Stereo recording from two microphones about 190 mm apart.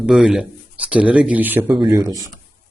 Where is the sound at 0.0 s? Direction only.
5° right (ahead or behind).